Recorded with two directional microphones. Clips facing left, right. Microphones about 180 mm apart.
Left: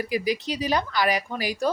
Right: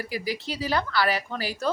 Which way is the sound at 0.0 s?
20° left (ahead or behind).